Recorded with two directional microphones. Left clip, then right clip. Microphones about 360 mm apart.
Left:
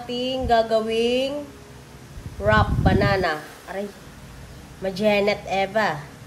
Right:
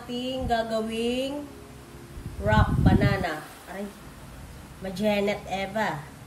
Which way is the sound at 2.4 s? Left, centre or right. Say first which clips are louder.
Left 5 dB; centre.